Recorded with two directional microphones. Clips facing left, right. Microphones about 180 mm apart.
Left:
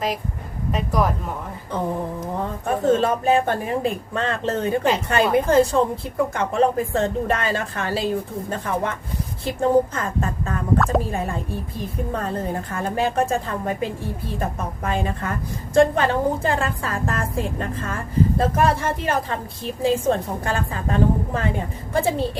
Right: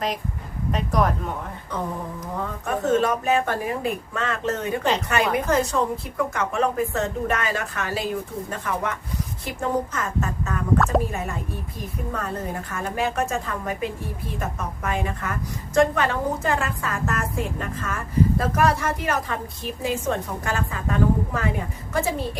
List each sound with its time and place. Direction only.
0.7 s speech: centre (ahead or behind)
2.4 s a woman's voice: 30° left (ahead or behind)